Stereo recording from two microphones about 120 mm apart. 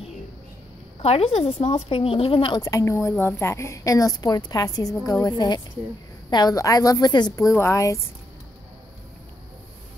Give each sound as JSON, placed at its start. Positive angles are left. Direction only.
{"t": 1.0, "sound": "a woman's voice", "side_deg": 55}
{"t": 2.7, "sound": "a woman's voice", "side_deg": 25}